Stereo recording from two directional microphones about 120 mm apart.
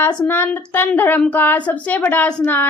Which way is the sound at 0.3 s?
15° left (ahead or behind).